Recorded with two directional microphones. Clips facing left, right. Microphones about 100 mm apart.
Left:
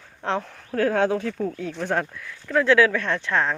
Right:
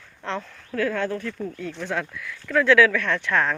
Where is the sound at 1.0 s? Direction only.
85° left.